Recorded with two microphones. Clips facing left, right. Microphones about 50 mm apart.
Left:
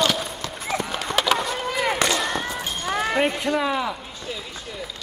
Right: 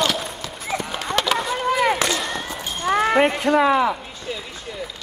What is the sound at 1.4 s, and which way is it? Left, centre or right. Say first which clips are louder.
Chop: right 5 dB; centre.